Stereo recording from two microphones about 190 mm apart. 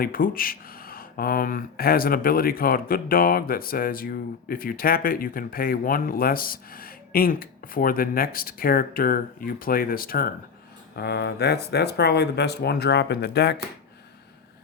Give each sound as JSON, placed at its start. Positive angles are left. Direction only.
{"t": 0.0, "sound": "speech", "side_deg": 50}